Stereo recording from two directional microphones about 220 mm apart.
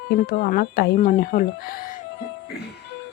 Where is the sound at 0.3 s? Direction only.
40° left (ahead or behind).